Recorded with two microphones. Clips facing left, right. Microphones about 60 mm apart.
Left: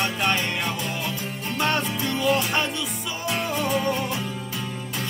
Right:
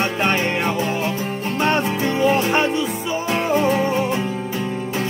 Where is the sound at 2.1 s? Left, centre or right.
Right.